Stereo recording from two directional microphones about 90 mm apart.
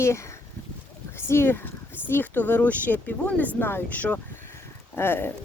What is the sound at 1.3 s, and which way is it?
Speech, 25° left (ahead or behind).